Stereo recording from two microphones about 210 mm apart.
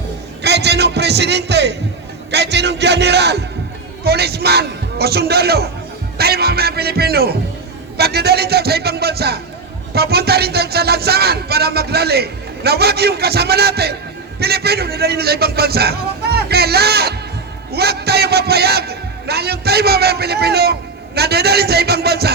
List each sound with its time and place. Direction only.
0.4 s a man's voice: 55° right (ahead or behind)
2.3 s music: 55° right (ahead or behind)